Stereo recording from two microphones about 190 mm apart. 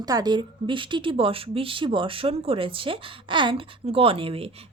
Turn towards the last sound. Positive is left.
turn(degrees=-30)  # may be behind; listen again after turning